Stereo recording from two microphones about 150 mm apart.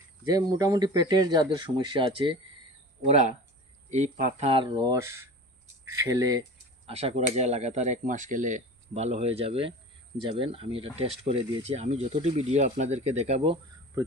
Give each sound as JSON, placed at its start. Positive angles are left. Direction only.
{"t": 0.3, "sound": "speech", "side_deg": -25}
{"t": 3.8, "sound": "speech", "side_deg": -50}
{"t": 4.7, "sound": "speech", "side_deg": -25}
{"t": 6.8, "sound": "speech", "side_deg": -45}